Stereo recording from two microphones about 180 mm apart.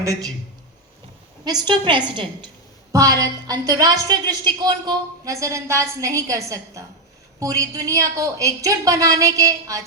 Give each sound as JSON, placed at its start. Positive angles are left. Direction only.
{"t": 0.0, "sound": "a woman's voice", "side_deg": -20}
{"t": 1.5, "sound": "a woman's voice", "side_deg": -25}